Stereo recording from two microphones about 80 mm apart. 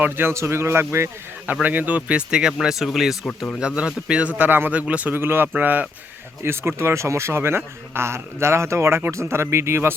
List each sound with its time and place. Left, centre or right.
0.0 s a man's voice: right
1.6 s a man's voice: right; by 3.2 s centre
3.2 s speech: centre
3.6 s a man's voice: centre
5.2 s speech: right
6.4 s a man's voice: right